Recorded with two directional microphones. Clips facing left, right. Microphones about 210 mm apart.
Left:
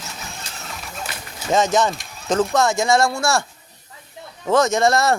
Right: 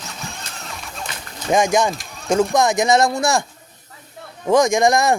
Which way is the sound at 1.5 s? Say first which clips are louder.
Right 1 dB; 15° right (ahead or behind).